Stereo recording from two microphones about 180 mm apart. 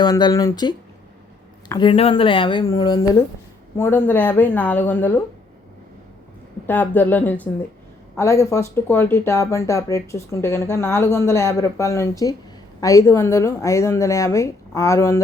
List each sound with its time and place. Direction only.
0.0 s speech: 25° left (ahead or behind)
1.8 s speech: 30° left (ahead or behind); by 5.2 s 10° left (ahead or behind)
6.7 s speech: 10° left (ahead or behind)